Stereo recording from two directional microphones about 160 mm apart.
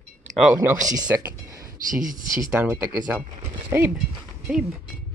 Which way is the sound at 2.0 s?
25° right (ahead or behind).